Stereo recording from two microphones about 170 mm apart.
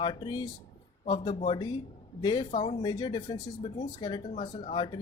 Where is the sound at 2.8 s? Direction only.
25° left (ahead or behind).